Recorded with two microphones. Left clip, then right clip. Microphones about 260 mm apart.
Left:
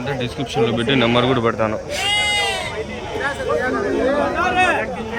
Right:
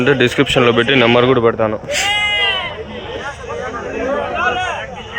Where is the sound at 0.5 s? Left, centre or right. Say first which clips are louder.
Right 4 dB; centre.